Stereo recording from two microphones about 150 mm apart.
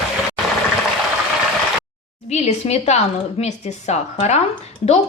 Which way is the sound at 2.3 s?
45° left (ahead or behind).